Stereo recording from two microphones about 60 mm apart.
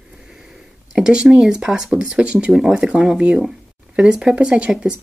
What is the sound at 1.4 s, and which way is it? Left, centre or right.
Speech, centre.